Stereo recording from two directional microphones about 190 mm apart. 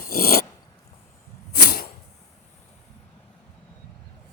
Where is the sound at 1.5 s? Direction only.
55° left (ahead or behind).